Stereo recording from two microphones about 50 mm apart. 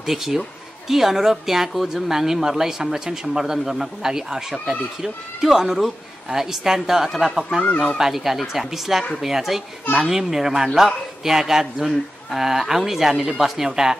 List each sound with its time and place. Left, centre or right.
0.0 s speech: centre
7.6 s speech: left
8.0 s speech: centre